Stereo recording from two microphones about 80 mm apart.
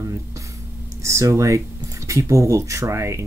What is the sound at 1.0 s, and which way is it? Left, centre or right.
Speech, right.